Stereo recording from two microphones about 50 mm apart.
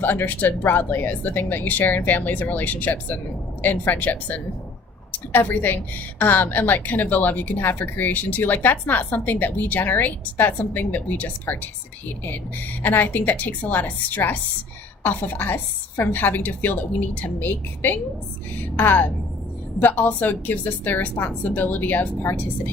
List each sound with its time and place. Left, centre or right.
0.0 s a woman's voice: left